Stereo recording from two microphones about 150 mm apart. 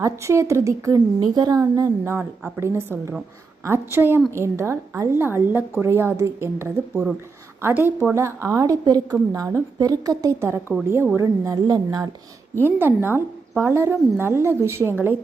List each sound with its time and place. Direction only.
0.0 s a woman's voice: 20° right (ahead or behind)
6.9 s a woman's voice: 5° right (ahead or behind); by 12.0 s 25° right (ahead or behind)
12.6 s a woman's voice: 15° right (ahead or behind)